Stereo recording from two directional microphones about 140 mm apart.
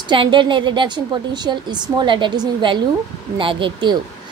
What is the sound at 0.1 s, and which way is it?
A woman's voice, 35° right (ahead or behind).